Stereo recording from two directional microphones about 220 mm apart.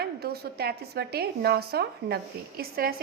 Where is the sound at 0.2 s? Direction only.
45° right (ahead or behind).